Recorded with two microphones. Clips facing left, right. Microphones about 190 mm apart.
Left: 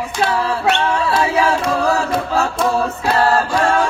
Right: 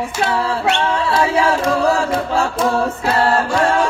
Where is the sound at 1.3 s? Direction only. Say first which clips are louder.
Right 1 dB; 30° right (ahead or behind).